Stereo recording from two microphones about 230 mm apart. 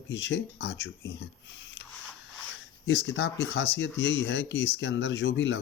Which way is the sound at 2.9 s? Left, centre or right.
Left.